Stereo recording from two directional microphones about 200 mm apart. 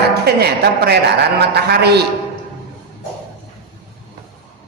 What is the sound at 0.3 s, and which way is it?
A man's voice, 55° right (ahead or behind).